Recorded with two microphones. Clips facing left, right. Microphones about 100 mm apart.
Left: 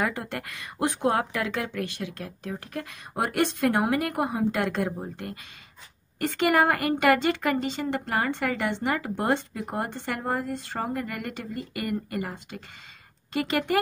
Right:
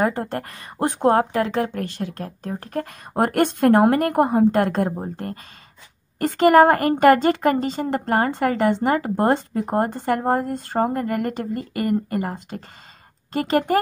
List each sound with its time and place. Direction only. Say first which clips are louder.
0.0 s a woman's voice: right 7 dB; 40° right (ahead or behind)